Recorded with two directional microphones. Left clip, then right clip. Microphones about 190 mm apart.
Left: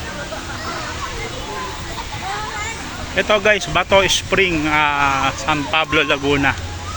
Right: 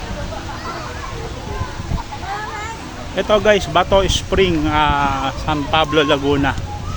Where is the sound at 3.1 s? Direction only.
15° right (ahead or behind).